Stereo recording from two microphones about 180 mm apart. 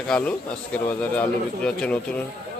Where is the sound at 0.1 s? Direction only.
10° left (ahead or behind).